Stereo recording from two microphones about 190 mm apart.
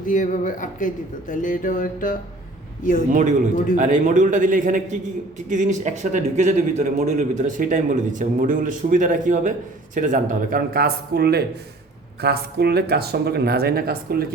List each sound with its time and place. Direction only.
0.0 s speech: 45° left (ahead or behind)
3.1 s a man's voice: 45° right (ahead or behind)